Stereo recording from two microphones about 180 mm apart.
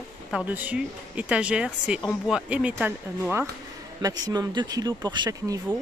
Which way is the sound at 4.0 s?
20° right (ahead or behind).